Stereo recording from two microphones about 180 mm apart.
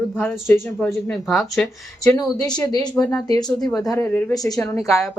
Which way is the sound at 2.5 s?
20° left (ahead or behind).